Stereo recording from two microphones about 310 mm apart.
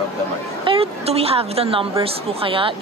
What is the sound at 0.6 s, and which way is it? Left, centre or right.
A woman's voice, centre.